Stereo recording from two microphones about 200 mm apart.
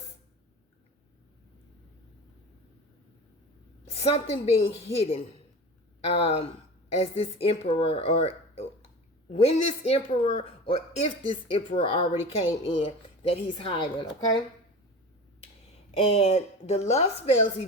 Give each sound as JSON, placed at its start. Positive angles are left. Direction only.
{"t": 3.8, "sound": "a woman's voice", "side_deg": 30}
{"t": 16.0, "sound": "speech", "side_deg": 30}